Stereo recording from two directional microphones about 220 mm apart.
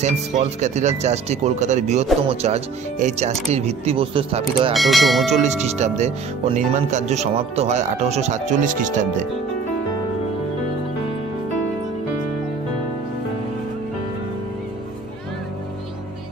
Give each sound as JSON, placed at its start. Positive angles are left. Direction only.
{"t": 0.0, "sound": "speech", "side_deg": -30}
{"t": 4.7, "sound": "speech", "side_deg": 0}
{"t": 5.4, "sound": "speech", "side_deg": -30}